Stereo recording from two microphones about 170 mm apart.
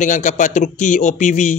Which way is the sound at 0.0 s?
45° left (ahead or behind).